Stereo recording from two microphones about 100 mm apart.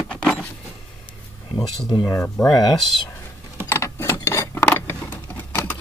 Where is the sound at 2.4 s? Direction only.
40° left (ahead or behind).